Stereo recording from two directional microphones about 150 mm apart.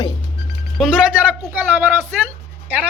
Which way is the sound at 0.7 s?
5° right (ahead or behind).